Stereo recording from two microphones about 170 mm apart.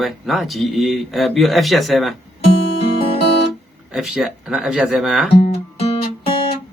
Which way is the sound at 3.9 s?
Centre (ahead or behind).